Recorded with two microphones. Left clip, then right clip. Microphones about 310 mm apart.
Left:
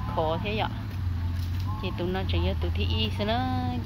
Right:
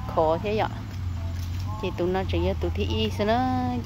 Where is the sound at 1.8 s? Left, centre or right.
Centre.